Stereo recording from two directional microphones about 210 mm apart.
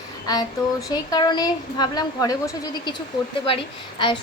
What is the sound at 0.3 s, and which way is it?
Speech, 15° left (ahead or behind).